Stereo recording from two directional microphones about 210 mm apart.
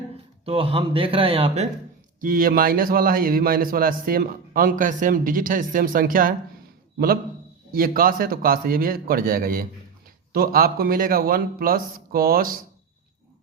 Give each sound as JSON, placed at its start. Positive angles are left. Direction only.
{"t": 0.4, "sound": "a man's voice", "side_deg": -25}
{"t": 2.2, "sound": "a man's voice", "side_deg": -40}
{"t": 7.7, "sound": "a man's voice", "side_deg": -45}